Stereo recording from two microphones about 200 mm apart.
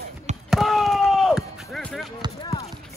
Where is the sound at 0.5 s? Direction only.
Centre (ahead or behind).